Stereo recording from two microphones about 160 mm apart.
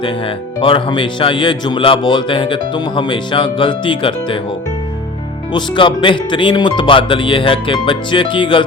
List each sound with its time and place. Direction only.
0.0 s speech: 35° left (ahead or behind)
5.5 s speech: 30° left (ahead or behind)